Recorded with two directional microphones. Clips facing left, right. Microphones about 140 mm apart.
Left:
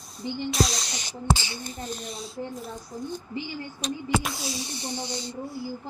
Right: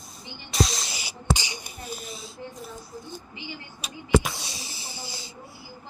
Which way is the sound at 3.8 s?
Centre (ahead or behind).